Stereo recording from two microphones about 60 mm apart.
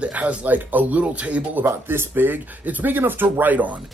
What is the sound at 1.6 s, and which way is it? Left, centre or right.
Speech, right.